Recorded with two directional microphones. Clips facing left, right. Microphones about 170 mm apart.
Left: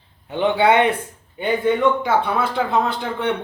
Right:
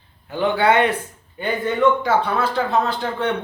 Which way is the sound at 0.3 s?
20° left (ahead or behind).